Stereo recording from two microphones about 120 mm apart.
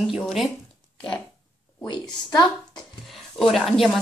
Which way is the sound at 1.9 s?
35° left (ahead or behind).